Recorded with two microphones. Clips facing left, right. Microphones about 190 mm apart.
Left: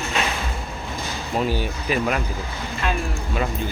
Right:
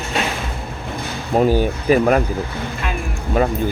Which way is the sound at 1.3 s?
45° right (ahead or behind).